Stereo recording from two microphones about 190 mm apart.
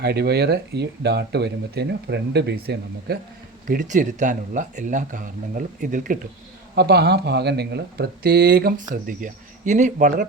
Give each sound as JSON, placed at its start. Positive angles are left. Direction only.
{"t": 0.0, "sound": "speech", "side_deg": -60}
{"t": 3.7, "sound": "speech", "side_deg": -40}
{"t": 6.7, "sound": "speech", "side_deg": -55}
{"t": 9.0, "sound": "speech", "side_deg": -45}